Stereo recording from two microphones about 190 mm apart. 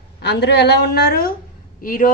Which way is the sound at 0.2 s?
65° left (ahead or behind).